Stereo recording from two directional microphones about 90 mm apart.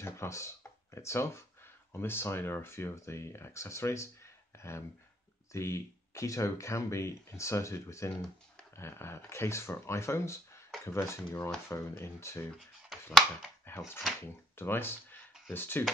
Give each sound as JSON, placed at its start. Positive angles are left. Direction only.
{"t": 0.0, "sound": "speech", "side_deg": 30}
{"t": 12.9, "sound": "a sound", "side_deg": 0}
{"t": 13.7, "sound": "speech", "side_deg": 25}